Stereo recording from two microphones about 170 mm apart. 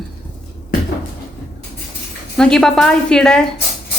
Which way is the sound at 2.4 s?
5° left (ahead or behind).